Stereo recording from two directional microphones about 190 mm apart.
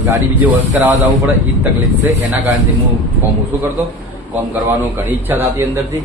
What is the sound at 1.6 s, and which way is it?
Speech, 10° right (ahead or behind).